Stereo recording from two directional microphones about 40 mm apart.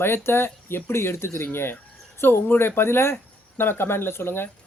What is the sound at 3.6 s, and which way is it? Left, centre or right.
Speech, left.